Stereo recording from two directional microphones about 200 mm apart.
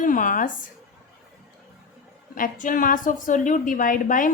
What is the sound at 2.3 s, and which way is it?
A woman's voice, 40° left (ahead or behind).